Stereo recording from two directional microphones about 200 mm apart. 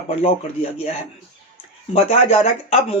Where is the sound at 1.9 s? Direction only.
30° left (ahead or behind).